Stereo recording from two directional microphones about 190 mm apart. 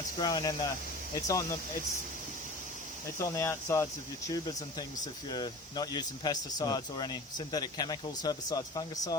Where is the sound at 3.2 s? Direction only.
15° left (ahead or behind).